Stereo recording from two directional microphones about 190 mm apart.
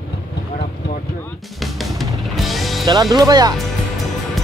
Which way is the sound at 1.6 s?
Centre (ahead or behind).